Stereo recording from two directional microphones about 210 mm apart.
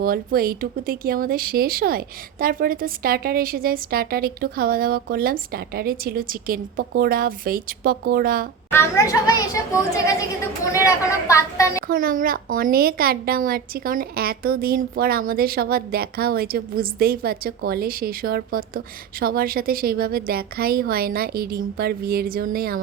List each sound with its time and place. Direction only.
0.0 s speech: 45° right (ahead or behind)
8.7 s speech: 15° left (ahead or behind)
11.9 s speech: 40° right (ahead or behind)